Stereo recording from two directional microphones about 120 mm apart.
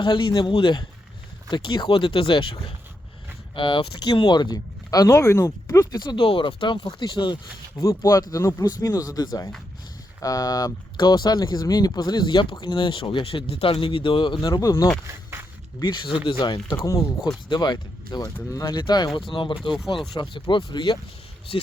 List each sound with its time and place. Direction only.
0.0 s speech: 40° left (ahead or behind)
7.8 s speech: 25° left (ahead or behind)
15.0 s walk: 20° right (ahead or behind)
15.8 s speech: 40° left (ahead or behind)